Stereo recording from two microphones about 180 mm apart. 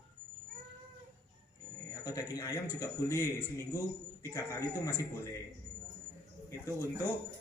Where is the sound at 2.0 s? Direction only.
20° left (ahead or behind).